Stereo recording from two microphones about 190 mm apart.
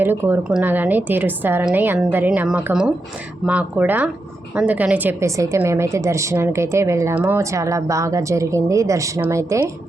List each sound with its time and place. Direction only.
0.0 s a woman's voice: 10° right (ahead or behind)